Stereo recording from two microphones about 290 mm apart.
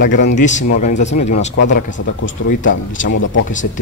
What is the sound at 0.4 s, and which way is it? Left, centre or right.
Speech, left.